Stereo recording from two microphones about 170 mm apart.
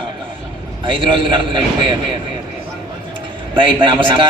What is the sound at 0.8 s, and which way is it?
Speech, 30° right (ahead or behind).